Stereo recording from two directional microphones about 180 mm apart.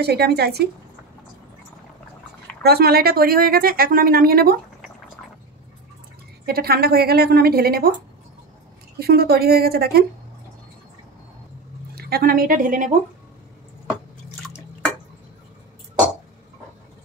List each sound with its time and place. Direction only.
0.0 s a woman's voice: 65° right (ahead or behind)
2.6 s a woman's voice: 60° right (ahead or behind)
6.4 s a woman's voice: 60° right (ahead or behind)
9.0 s a woman's voice: 60° right (ahead or behind)
11.9 s a woman's voice: 60° right (ahead or behind)